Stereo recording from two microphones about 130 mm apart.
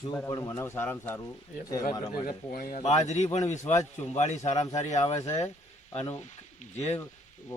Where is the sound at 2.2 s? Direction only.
90° left; by 5.2 s 55° left (ahead or behind).